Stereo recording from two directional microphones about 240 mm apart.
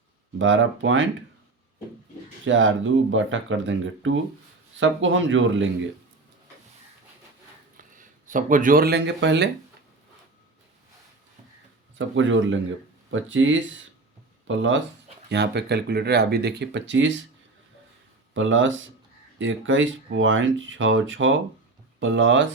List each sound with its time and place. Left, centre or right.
0.3 s speech: right
2.4 s speech: right
7.8 s speech: right
11.9 s speech: right
18.3 s speech: right